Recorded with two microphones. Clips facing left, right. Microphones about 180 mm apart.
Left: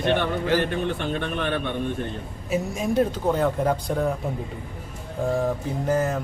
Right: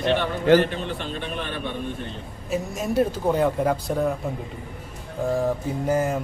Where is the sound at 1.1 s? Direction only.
60° left (ahead or behind).